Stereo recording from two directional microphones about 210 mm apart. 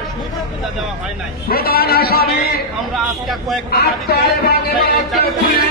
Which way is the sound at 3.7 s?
45° left (ahead or behind).